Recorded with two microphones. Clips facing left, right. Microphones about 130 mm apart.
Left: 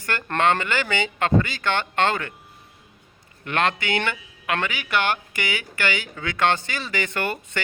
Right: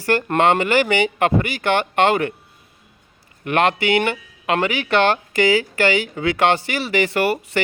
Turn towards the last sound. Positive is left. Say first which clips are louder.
# right 8 dB
turn(degrees=-30)  # may be behind; listen again after turning